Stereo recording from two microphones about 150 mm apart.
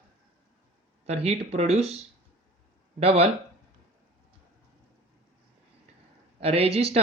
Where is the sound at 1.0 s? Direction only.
45° right (ahead or behind).